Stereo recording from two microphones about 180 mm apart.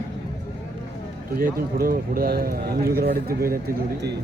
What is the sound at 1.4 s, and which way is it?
A man's voice, 55° right (ahead or behind).